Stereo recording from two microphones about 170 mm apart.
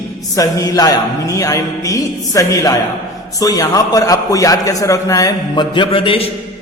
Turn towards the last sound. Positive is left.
turn(degrees=30)  # may be behind; listen again after turning